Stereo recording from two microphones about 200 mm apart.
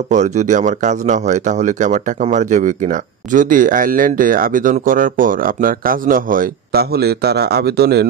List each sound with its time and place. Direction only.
0.1 s speech: 35° right (ahead or behind); by 8.1 s 55° right (ahead or behind)